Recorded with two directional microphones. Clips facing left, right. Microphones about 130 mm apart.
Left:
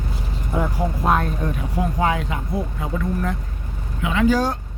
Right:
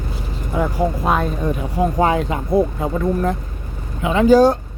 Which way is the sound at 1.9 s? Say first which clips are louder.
Right 4 dB; 35° right (ahead or behind).